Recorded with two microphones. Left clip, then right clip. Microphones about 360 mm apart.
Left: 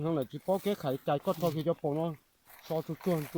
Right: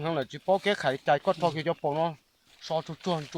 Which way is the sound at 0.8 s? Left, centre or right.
Centre.